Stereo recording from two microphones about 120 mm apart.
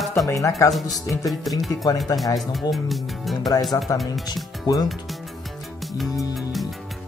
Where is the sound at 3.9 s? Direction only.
25° left (ahead or behind).